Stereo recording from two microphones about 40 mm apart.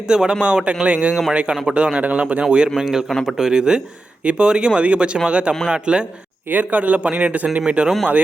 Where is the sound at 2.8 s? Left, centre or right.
Centre.